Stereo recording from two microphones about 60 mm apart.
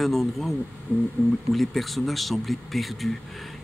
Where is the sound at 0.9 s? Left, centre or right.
Left.